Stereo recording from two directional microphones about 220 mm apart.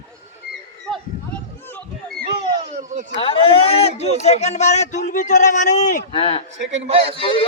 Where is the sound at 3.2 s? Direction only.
25° left (ahead or behind).